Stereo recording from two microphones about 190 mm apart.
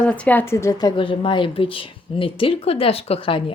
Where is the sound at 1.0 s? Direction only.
25° left (ahead or behind).